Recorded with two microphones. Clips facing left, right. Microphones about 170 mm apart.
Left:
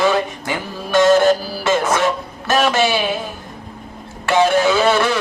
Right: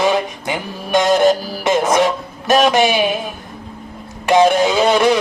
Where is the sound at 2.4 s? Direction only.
15° right (ahead or behind).